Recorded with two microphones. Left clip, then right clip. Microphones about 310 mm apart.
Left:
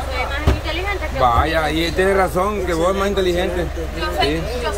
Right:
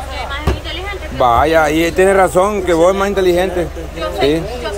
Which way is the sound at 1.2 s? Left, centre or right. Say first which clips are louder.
Right 6 dB; centre.